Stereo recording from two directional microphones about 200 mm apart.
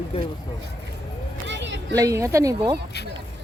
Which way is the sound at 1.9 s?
15° right (ahead or behind).